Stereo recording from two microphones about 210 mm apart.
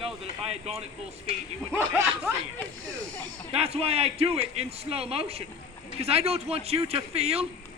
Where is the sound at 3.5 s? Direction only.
30° right (ahead or behind).